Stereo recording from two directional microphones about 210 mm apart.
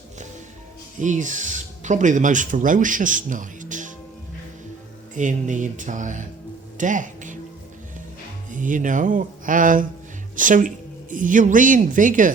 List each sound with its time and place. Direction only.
1.0 s speech: 35° right (ahead or behind)
5.1 s speech: 35° right (ahead or behind)
6.7 s music: 35° right (ahead or behind)
8.4 s speech: 40° right (ahead or behind)